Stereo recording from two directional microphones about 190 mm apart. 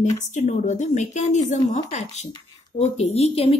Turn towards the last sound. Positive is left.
turn(degrees=30)  # may be behind; listen again after turning